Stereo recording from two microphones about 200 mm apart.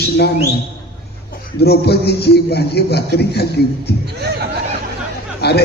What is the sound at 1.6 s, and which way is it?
A man's voice, 55° left (ahead or behind).